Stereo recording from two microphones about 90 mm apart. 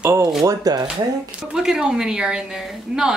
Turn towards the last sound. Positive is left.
turn(degrees=-5)  # may be behind; listen again after turning